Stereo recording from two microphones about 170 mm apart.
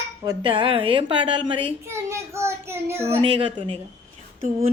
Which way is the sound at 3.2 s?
30° right (ahead or behind).